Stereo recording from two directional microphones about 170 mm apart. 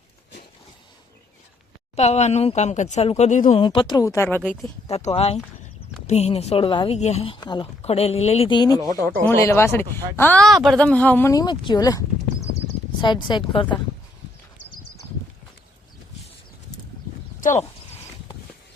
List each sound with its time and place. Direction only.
2.0 s speech: 40° left (ahead or behind)
3.6 s speech: 25° left (ahead or behind); by 4.7 s 10° left (ahead or behind)
4.9 s speech: 40° left (ahead or behind)
7.3 s a woman's voice: 25° left (ahead or behind)
7.8 s speech: 40° left (ahead or behind)
8.8 s speech: 20° right (ahead or behind)
9.2 s a woman's voice: 15° left (ahead or behind)
17.4 s speech: 45° left (ahead or behind)